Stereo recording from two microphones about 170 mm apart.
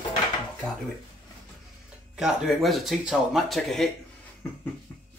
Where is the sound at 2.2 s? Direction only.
Centre (ahead or behind).